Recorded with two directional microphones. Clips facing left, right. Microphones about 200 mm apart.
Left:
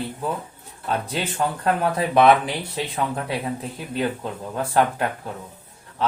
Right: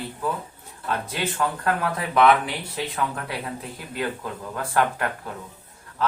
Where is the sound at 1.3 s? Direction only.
25° left (ahead or behind).